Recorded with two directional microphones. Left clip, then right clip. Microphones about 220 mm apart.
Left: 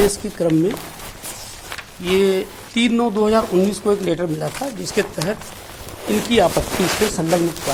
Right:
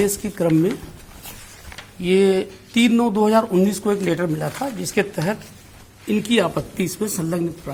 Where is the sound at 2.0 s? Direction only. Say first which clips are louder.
Even; 30° right (ahead or behind).